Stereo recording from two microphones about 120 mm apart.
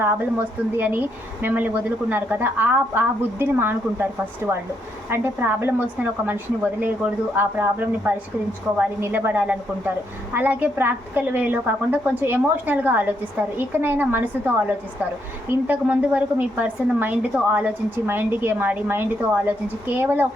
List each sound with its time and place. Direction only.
0.0 s a woman's voice: 15° right (ahead or behind)